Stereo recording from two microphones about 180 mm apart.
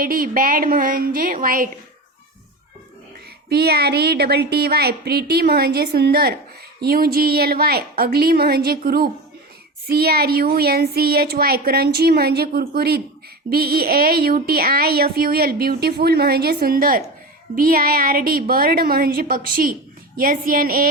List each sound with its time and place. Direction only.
0.0 s a woman's voice: 50° right (ahead or behind)
3.5 s a woman's voice: 60° right (ahead or behind)